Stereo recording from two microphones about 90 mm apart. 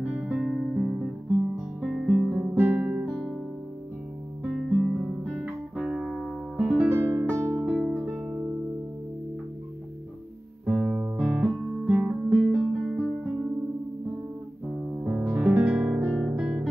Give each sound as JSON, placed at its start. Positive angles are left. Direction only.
{"t": 0.2, "sound": "music", "side_deg": -15}
{"t": 1.8, "sound": "guitar", "side_deg": -5}
{"t": 2.3, "sound": "guitar", "side_deg": -20}
{"t": 4.4, "sound": "music", "side_deg": -10}
{"t": 7.0, "sound": "music", "side_deg": -30}
{"t": 7.6, "sound": "music", "side_deg": -15}
{"t": 10.6, "sound": "guitar", "side_deg": -10}
{"t": 15.0, "sound": "music", "side_deg": -15}
{"t": 16.0, "sound": "guitar", "side_deg": -20}